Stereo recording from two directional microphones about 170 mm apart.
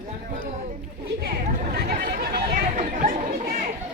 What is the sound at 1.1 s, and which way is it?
Chatter, 65° right (ahead or behind).